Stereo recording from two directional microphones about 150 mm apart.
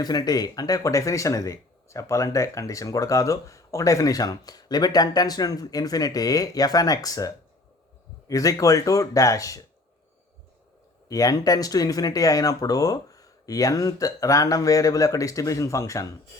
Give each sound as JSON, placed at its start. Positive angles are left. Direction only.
{"t": 0.0, "sound": "speech", "side_deg": 25}
{"t": 11.1, "sound": "speech", "side_deg": 25}